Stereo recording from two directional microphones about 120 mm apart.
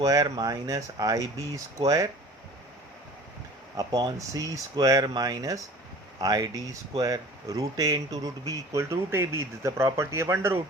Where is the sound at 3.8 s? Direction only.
30° right (ahead or behind).